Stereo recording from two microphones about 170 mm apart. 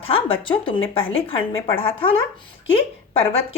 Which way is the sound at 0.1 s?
30° left (ahead or behind).